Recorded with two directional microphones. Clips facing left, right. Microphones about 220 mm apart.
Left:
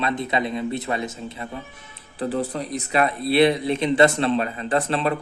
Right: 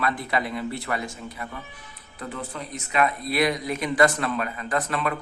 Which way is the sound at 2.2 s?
35° left (ahead or behind).